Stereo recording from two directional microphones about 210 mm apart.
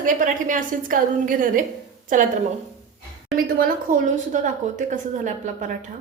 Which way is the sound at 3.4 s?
45° right (ahead or behind).